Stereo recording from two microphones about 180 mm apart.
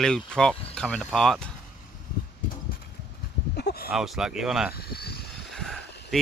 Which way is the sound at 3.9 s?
Centre (ahead or behind).